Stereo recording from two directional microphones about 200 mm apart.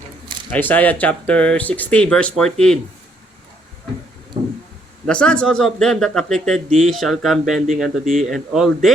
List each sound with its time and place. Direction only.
0.5 s speech: 10° left (ahead or behind)
5.0 s speech: 5° left (ahead or behind)